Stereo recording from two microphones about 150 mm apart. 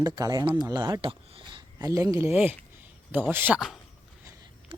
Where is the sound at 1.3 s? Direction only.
35° right (ahead or behind).